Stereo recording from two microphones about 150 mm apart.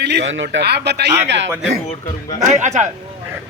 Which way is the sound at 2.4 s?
50° right (ahead or behind).